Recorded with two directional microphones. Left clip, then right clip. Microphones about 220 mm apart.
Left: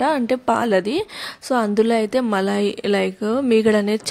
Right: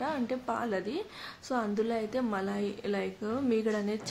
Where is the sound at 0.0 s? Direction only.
40° left (ahead or behind).